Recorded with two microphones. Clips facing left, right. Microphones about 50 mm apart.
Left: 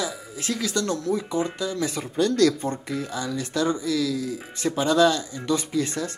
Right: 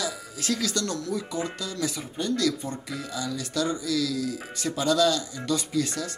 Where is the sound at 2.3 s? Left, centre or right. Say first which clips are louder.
Left 5 dB; left.